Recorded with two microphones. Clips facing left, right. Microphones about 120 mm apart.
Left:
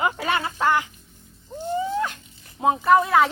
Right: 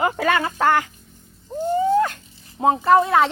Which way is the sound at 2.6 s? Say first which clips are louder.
Right 2 dB; 25° right (ahead or behind).